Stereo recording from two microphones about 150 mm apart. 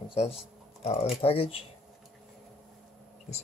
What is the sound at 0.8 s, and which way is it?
Speech, 40° left (ahead or behind).